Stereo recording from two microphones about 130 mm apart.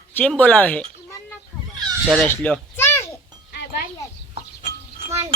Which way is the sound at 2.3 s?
10° left (ahead or behind).